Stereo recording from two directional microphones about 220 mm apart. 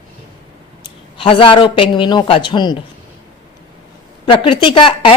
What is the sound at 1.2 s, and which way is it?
Speech, 25° left (ahead or behind).